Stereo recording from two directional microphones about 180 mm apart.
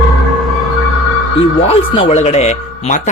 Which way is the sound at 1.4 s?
30° left (ahead or behind).